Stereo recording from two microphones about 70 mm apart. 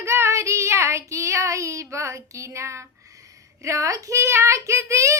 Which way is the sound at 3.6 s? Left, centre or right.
Right.